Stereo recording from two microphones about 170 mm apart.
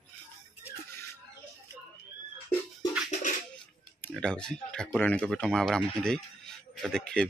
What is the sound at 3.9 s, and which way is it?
Speech, 5° left (ahead or behind).